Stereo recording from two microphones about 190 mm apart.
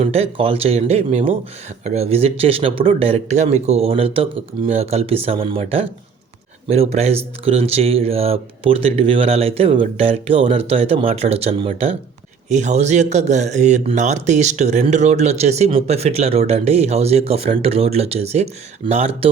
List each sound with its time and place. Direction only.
0.0 s speech: 30° right (ahead or behind)